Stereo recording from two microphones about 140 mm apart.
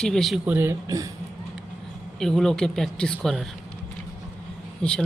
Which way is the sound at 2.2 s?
5° left (ahead or behind).